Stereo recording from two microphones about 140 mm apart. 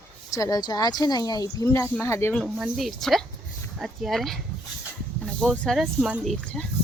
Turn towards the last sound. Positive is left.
turn(degrees=5)  # may be behind; listen again after turning